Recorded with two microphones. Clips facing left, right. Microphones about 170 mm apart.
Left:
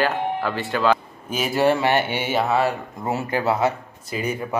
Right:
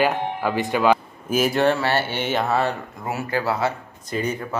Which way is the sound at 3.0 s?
25° left (ahead or behind).